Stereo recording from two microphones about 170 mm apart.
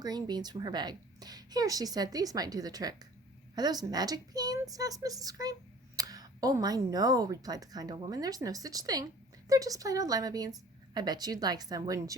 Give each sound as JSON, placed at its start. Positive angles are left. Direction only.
{"t": 0.0, "sound": "speech", "side_deg": -25}